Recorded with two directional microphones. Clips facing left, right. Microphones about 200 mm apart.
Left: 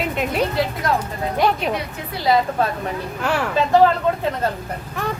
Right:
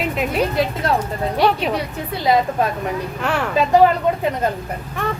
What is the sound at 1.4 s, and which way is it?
Speech, centre (ahead or behind).